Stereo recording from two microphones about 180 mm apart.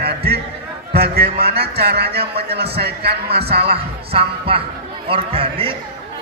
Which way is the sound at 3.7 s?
30° right (ahead or behind).